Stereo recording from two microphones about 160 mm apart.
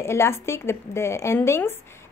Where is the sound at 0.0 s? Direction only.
15° left (ahead or behind).